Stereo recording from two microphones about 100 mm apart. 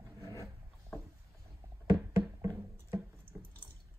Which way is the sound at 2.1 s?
25° right (ahead or behind).